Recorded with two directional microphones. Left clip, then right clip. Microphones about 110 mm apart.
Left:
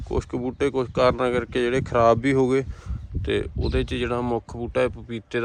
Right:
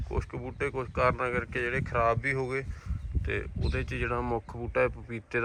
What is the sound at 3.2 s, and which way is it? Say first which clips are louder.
Speech: left 9 dB; 50° left (ahead or behind).